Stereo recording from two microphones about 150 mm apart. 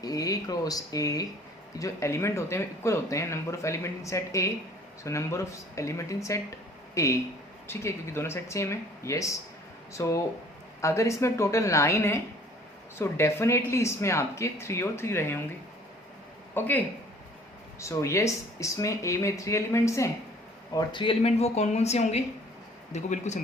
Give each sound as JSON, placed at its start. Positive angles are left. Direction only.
{"t": 0.0, "sound": "speech", "side_deg": 25}
{"t": 16.6, "sound": "speech", "side_deg": 10}
{"t": 20.7, "sound": "speech", "side_deg": 35}